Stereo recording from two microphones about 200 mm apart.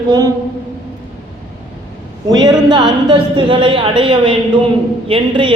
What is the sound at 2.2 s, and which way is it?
A man's voice, 20° right (ahead or behind).